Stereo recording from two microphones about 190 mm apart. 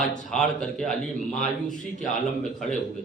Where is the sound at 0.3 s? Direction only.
5° left (ahead or behind).